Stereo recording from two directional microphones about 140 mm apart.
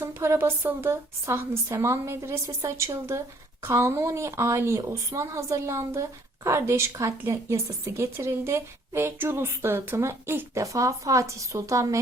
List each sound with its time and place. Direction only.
0.0 s a woman's voice: 20° right (ahead or behind)